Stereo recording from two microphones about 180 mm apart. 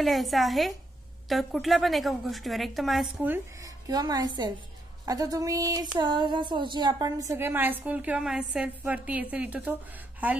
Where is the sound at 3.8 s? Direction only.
20° right (ahead or behind).